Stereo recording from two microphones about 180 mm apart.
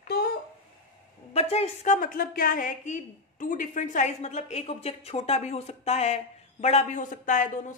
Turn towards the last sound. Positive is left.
turn(degrees=45)  # may be behind; listen again after turning